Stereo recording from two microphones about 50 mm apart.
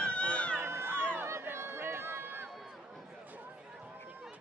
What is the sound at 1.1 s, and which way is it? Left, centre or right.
Run, right.